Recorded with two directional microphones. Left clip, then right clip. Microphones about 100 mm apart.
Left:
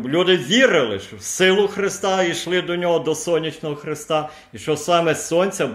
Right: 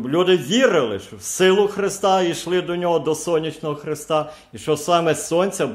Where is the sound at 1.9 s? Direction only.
65° right (ahead or behind).